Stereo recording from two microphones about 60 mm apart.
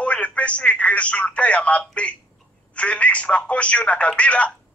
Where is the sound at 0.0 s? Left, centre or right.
Left.